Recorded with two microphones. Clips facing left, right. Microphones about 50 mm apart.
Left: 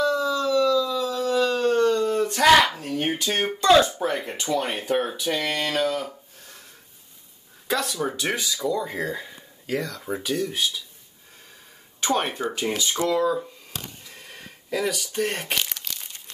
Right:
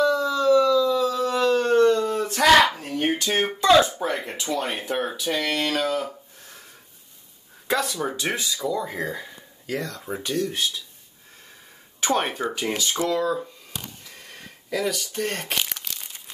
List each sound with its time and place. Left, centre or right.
0.0 s howl: centre
7.6 s speech: centre
12.0 s speech: centre
14.1 s camera: centre
15.5 s crumpling: centre